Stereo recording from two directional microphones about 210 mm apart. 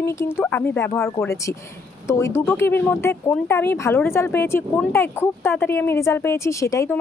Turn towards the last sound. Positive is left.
turn(degrees=15)  # may be behind; listen again after turning